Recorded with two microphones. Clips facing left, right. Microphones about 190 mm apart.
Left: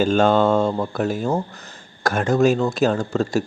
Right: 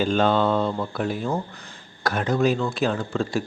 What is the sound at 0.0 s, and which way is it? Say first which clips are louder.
Speech: left 4 dB; 45° left (ahead or behind).